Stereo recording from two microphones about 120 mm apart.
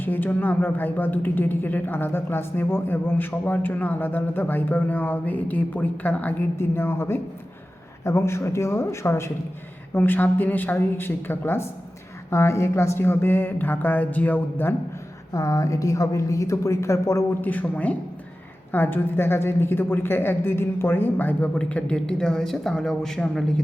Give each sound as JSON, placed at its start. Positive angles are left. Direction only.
{"t": 0.0, "sound": "a woman's voice", "side_deg": 15}
{"t": 15.3, "sound": "a woman's voice", "side_deg": 30}